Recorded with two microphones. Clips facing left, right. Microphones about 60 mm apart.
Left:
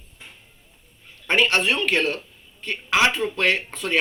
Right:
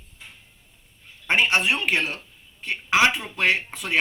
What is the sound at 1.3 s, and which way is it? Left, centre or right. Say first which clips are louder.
Speech: left 1 dB; centre.